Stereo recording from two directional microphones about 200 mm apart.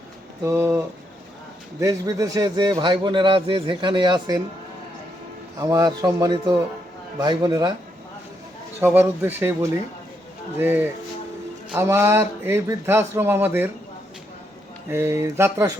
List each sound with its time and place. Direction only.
0.4 s a man's voice: 15° right (ahead or behind)
1.8 s a man's voice: 15° right (ahead or behind)
5.5 s a man's voice: 20° right (ahead or behind)
8.8 s a man's voice: 10° right (ahead or behind)
14.8 s a man's voice: 10° right (ahead or behind)